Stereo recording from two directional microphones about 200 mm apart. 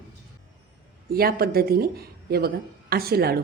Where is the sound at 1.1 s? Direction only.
50° right (ahead or behind).